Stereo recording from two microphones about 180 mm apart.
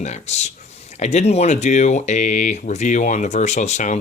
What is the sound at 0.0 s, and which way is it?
Speech, 40° left (ahead or behind).